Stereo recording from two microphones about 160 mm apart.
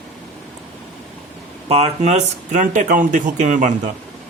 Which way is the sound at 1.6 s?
40° right (ahead or behind).